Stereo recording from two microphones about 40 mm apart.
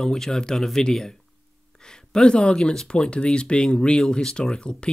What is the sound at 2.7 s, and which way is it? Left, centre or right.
Speech, left.